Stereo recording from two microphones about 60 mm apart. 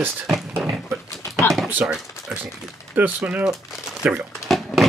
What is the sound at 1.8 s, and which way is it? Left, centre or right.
Speech, right.